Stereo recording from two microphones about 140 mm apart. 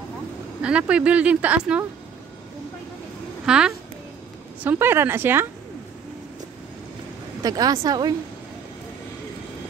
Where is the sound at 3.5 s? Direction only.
5° right (ahead or behind).